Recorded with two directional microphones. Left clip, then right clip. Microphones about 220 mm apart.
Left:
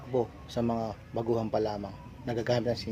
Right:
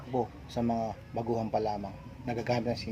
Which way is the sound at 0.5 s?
30° left (ahead or behind).